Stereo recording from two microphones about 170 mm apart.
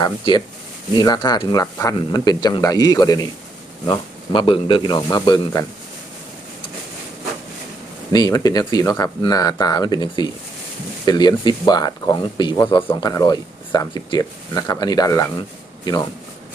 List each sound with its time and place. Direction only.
0.0 s speech: 25° left (ahead or behind)
8.1 s speech: 20° left (ahead or behind)